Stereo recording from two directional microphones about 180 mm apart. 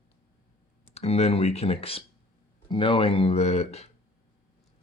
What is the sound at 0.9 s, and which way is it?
Speech, 35° left (ahead or behind).